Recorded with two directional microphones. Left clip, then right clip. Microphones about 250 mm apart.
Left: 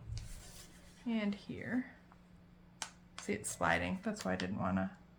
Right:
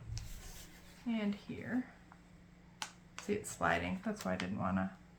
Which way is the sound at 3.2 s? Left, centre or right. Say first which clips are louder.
Even; left.